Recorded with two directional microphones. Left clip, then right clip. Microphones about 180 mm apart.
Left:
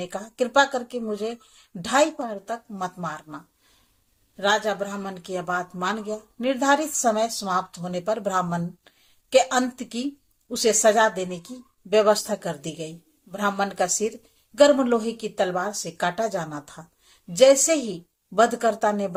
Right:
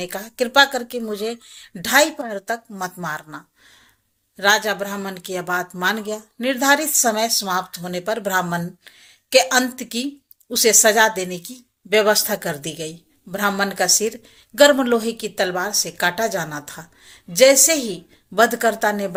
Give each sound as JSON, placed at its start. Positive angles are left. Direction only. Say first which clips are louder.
{"t": 0.0, "sound": "a woman's voice", "louder": "right 3 dB", "side_deg": -15}